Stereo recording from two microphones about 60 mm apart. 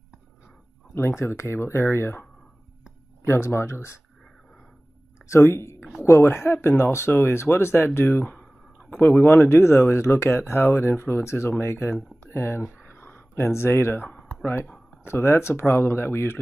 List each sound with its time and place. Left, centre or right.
0.9 s speech: left
1.6 s speech: left
3.3 s speech: left
5.3 s speech: left
12.8 s a sound: left
14.4 s speech: left